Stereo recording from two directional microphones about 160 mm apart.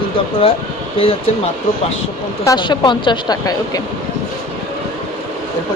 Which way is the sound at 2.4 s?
25° left (ahead or behind).